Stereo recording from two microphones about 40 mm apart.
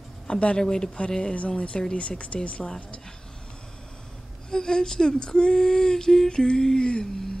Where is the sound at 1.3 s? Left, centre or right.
Left.